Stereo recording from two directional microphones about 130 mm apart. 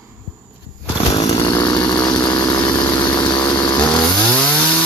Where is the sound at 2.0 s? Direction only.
35° left (ahead or behind).